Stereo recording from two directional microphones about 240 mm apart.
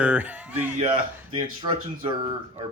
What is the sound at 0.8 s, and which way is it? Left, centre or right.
Speech, right.